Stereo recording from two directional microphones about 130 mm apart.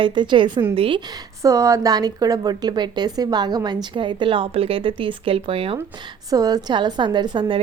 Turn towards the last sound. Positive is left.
turn(degrees=-35)  # may be behind; listen again after turning